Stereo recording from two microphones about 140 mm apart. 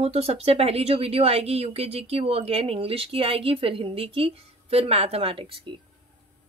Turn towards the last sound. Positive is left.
turn(degrees=-40)  # may be behind; listen again after turning